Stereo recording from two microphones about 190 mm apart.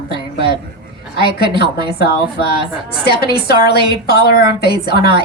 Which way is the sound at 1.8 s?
55° left (ahead or behind).